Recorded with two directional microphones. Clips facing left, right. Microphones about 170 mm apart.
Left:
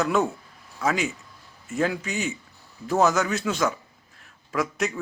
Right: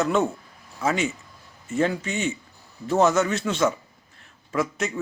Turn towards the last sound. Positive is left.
turn(degrees=0)  # may be behind; listen again after turning